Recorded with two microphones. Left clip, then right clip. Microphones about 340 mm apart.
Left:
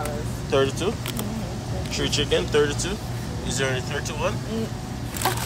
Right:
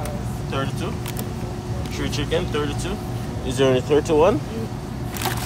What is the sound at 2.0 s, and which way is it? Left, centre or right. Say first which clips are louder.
Speech: left 2 dB; centre.